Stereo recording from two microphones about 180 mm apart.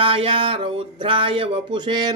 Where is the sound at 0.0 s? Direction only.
30° right (ahead or behind).